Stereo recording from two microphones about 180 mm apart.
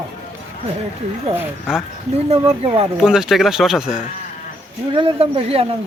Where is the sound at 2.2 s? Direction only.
30° right (ahead or behind).